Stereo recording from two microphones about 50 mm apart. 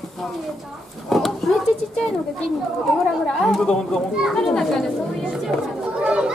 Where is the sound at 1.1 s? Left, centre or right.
Centre.